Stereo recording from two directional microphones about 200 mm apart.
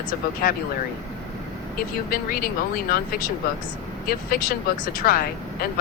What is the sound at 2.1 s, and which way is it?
Speech, 50° left (ahead or behind).